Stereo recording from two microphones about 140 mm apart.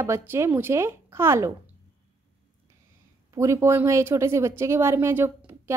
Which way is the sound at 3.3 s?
20° right (ahead or behind).